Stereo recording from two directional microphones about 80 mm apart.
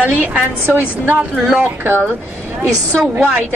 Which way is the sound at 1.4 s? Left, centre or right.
Centre.